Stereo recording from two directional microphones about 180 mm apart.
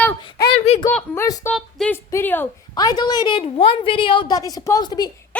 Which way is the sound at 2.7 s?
25° left (ahead or behind).